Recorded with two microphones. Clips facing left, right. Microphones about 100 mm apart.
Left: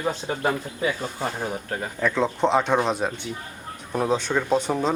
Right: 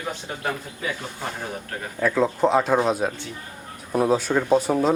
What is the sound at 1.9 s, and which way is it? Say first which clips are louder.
Speech: right 3 dB; 5° right (ahead or behind).